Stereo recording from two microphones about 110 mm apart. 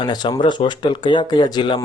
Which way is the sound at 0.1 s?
45° left (ahead or behind).